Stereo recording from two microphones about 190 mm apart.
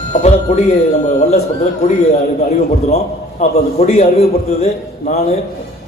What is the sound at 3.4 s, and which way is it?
A man's voice, 40° left (ahead or behind).